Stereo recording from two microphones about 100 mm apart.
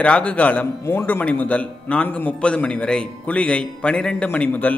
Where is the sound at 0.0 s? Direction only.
10° left (ahead or behind).